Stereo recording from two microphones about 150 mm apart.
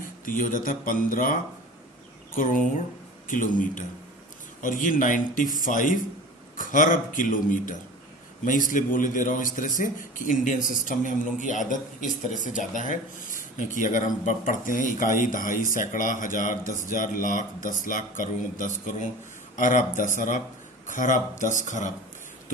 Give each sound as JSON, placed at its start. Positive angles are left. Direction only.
{"t": 0.0, "sound": "a man's voice", "side_deg": 65}